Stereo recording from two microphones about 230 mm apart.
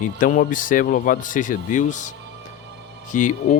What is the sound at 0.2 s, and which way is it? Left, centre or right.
Speech, left.